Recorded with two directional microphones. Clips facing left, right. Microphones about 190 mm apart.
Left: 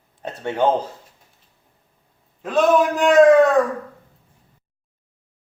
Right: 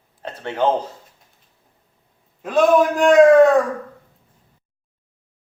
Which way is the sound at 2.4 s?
Centre (ahead or behind).